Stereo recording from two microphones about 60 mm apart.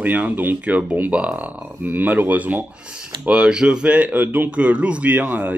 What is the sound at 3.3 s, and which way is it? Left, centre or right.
Speech, centre.